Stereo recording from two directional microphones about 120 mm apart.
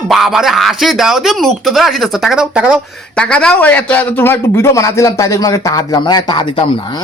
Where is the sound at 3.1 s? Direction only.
10° left (ahead or behind); by 6.6 s 40° left (ahead or behind).